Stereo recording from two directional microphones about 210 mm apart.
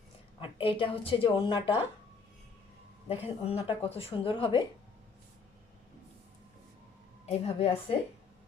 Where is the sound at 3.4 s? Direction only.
30° left (ahead or behind).